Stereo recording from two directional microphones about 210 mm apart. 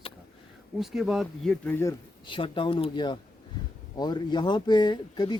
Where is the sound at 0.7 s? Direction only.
Centre (ahead or behind).